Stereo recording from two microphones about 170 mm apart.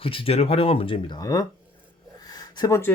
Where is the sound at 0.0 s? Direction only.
30° left (ahead or behind).